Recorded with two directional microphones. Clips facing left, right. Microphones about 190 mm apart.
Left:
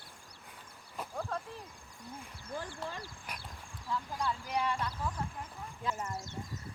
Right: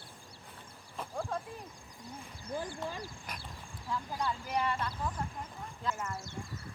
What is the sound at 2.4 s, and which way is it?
Speech, 15° right (ahead or behind).